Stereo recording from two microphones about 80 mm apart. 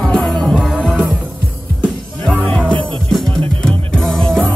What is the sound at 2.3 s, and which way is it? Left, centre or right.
Music, centre.